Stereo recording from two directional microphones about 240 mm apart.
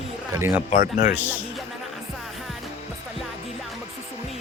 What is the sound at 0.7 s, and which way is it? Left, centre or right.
Speech, left.